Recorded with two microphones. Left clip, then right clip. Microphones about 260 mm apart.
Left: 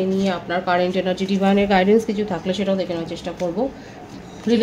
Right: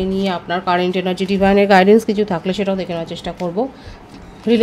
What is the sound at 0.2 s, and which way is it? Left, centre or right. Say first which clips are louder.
Speech: right 2 dB; right.